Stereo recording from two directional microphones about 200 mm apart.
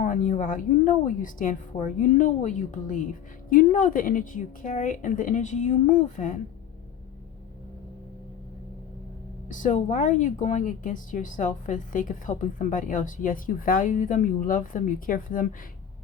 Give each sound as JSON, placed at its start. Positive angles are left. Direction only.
{"t": 0.0, "sound": "speech", "side_deg": 40}
{"t": 9.5, "sound": "speech", "side_deg": 40}